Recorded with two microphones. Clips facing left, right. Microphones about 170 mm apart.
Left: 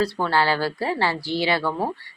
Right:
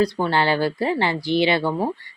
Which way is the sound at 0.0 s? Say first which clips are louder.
Right 2 dB; 20° right (ahead or behind).